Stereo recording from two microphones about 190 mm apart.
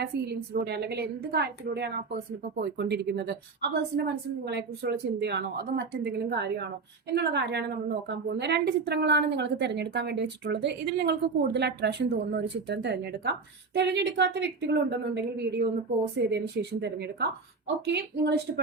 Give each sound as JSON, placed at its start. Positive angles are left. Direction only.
{"t": 0.0, "sound": "a woman's voice", "side_deg": -60}